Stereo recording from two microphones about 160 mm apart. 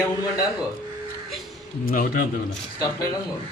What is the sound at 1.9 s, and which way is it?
Speech, 60° left (ahead or behind).